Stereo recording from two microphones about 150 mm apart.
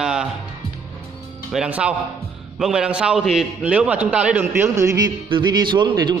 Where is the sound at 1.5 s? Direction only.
5° right (ahead or behind).